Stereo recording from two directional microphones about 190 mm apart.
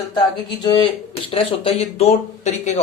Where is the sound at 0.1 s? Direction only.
25° left (ahead or behind).